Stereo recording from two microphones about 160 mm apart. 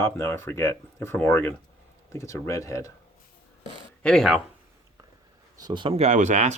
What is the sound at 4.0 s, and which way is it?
Speech, 5° left (ahead or behind).